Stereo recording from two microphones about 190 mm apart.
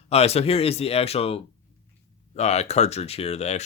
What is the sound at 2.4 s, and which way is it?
Speech, 35° left (ahead or behind).